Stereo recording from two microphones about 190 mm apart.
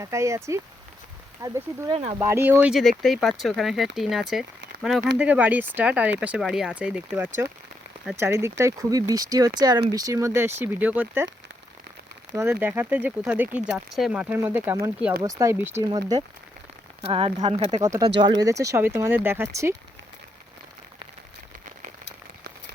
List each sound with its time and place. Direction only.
0.0 s speech: 15° right (ahead or behind)
1.9 s speech: 35° right (ahead or behind)
2.1 s speech: 15° right (ahead or behind)
12.3 s speech: 10° right (ahead or behind)